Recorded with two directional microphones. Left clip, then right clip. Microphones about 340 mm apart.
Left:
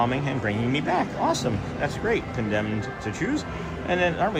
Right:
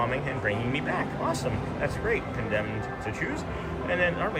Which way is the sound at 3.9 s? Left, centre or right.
Centre.